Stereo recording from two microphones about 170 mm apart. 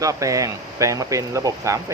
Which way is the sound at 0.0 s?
20° right (ahead or behind).